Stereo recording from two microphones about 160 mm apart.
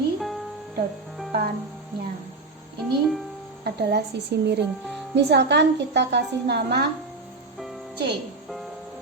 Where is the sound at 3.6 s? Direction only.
90° right.